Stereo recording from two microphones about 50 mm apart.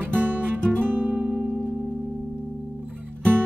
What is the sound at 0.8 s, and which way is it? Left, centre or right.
Guitar, right.